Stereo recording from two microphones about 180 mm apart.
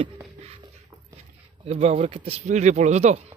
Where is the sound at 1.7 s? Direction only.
35° right (ahead or behind).